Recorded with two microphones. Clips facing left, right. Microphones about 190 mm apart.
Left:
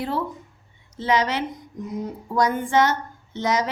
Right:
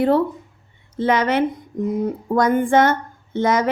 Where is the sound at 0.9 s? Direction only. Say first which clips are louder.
Right 5 dB; 55° right (ahead or behind).